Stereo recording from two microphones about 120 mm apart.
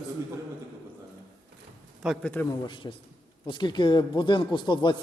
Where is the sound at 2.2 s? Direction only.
15° left (ahead or behind).